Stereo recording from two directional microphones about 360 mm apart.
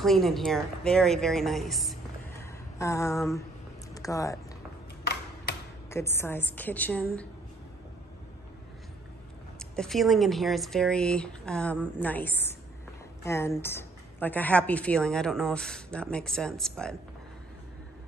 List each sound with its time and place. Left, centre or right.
0.0 s speech: centre
2.4 s a sound: centre
3.9 s speech: centre
5.0 s tick-tock: left
5.9 s speech: centre
9.6 s a woman's voice: centre